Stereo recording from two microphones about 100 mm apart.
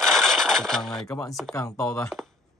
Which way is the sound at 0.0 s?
5° left (ahead or behind).